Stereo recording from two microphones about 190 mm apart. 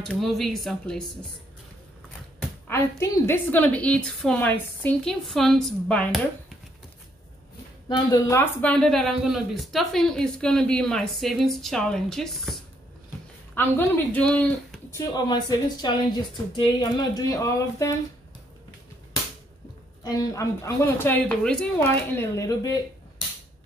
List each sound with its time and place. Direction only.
0.0 s speech: centre (ahead or behind)
2.7 s a woman's voice: 15° left (ahead or behind)
7.9 s speech: 20° left (ahead or behind); by 12.5 s centre (ahead or behind)
13.6 s speech: 10° left (ahead or behind)
15.0 s a woman's voice: 20° left (ahead or behind)
20.0 s a woman's voice: 20° left (ahead or behind)